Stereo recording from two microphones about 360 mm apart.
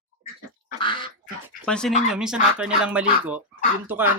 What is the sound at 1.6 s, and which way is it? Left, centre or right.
Speech, centre.